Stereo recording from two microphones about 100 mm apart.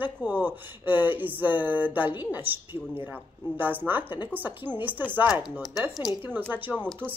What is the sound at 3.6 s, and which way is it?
Speech, 20° right (ahead or behind).